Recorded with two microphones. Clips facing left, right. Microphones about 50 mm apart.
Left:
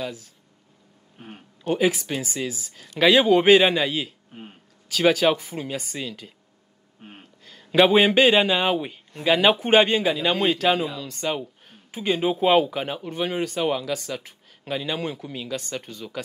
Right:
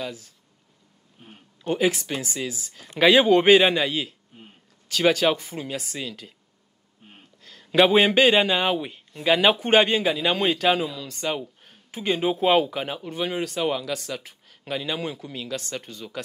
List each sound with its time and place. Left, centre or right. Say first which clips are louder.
0.0 s speech: left 1 dB; centre
1.2 s speech: left 6 dB; left
1.6 s speech: left 1 dB; centre
4.3 s speech: left 7 dB; left
4.8 s speech: left 1 dB; centre
7.0 s a sound: left 7 dB; left
7.4 s a man's voice: left 1 dB; centre